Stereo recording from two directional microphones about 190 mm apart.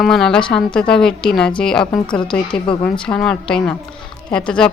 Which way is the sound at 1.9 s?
25° left (ahead or behind).